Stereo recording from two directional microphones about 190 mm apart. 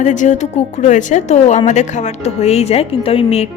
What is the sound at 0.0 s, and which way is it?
A woman's voice, 40° left (ahead or behind).